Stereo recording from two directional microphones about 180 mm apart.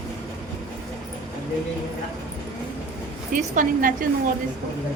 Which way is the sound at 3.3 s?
45° right (ahead or behind).